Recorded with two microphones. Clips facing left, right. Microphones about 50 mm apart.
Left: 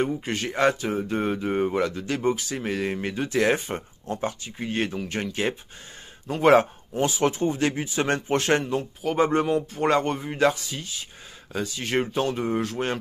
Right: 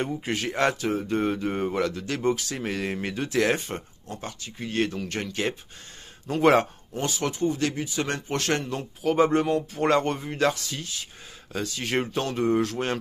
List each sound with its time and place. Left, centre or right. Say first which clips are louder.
0.0 s speech: left 2 dB; centre
7.0 s speech: left 5 dB; centre
7.2 s speech: even; left
8.7 s speech: right 1 dB; centre